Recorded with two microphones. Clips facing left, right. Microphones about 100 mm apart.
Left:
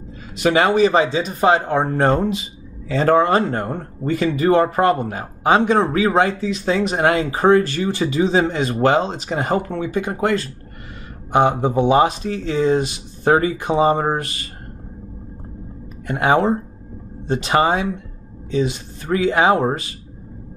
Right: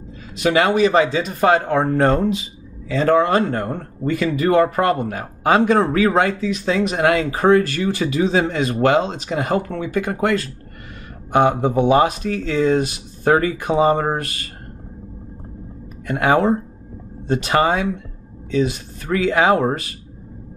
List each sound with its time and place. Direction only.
0.4 s speech: 35° left (ahead or behind)
2.9 s speech: 35° left (ahead or behind)
3.6 s speech: 5° left (ahead or behind)
4.0 s speech: 30° left (ahead or behind)
9.7 s speech: 25° left (ahead or behind)
11.6 s speech: 25° left (ahead or behind)
16.1 s speech: 25° left (ahead or behind)